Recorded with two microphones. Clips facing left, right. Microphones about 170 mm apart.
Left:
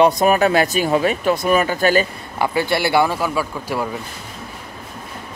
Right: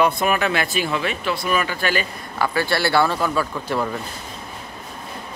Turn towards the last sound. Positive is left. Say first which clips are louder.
# even
turn(degrees=10)  # may be behind; listen again after turning